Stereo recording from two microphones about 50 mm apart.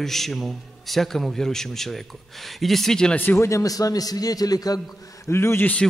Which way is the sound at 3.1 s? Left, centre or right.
Left.